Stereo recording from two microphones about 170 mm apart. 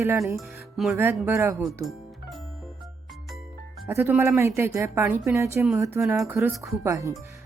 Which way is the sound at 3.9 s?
15° right (ahead or behind).